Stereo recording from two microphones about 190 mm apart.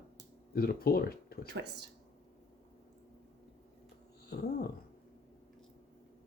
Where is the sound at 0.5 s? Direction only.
50° left (ahead or behind).